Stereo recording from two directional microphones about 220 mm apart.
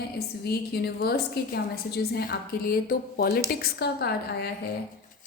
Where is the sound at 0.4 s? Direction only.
45° left (ahead or behind).